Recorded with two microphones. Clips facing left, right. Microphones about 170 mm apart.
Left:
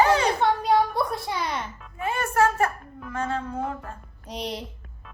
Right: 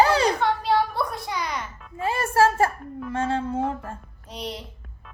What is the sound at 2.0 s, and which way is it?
Speech, 30° right (ahead or behind).